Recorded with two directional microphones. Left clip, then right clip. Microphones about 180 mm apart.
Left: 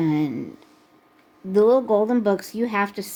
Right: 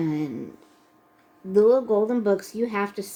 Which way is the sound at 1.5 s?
40° left (ahead or behind).